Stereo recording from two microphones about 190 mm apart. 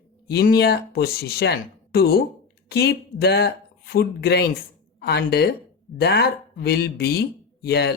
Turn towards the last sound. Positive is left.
turn(degrees=60)  # may be behind; listen again after turning